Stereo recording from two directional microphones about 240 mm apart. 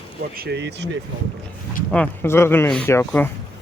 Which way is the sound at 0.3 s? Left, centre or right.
Right.